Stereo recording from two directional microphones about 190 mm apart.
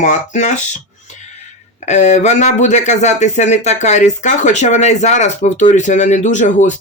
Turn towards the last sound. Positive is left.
turn(degrees=40)  # may be behind; listen again after turning